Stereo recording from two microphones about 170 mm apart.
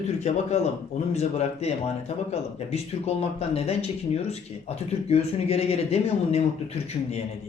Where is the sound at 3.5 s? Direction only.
35° left (ahead or behind).